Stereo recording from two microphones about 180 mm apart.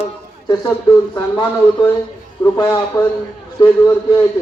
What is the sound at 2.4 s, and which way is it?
A man's voice, 20° left (ahead or behind).